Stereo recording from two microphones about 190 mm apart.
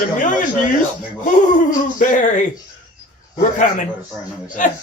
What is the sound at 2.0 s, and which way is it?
Speech, 45° left (ahead or behind).